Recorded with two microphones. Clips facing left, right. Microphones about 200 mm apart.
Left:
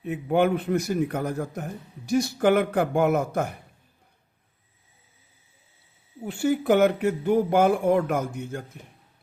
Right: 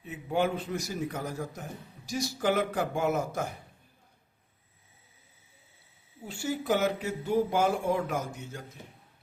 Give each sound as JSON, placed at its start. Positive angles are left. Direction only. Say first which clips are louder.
{"t": 0.0, "sound": "a man's voice", "louder": "left 7 dB", "side_deg": 60}
{"t": 6.2, "sound": "a man's voice", "louder": "left 8 dB", "side_deg": 60}